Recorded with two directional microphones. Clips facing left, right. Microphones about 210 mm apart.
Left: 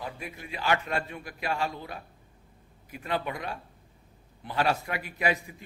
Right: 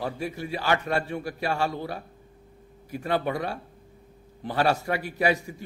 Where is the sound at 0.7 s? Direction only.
40° right (ahead or behind).